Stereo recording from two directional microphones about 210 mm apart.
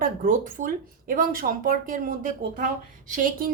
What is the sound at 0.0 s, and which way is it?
Speech, 40° right (ahead or behind).